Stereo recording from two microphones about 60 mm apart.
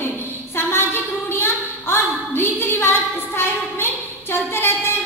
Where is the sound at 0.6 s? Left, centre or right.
Left.